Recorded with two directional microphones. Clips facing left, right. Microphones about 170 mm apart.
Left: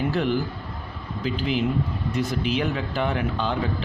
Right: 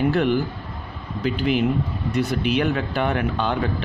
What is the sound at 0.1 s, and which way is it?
Speech, 60° right (ahead or behind).